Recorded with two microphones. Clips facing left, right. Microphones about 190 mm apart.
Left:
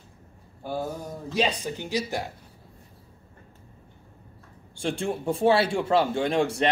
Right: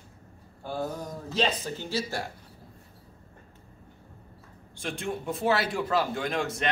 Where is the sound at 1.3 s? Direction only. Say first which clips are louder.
Left 2 dB; 15° left (ahead or behind).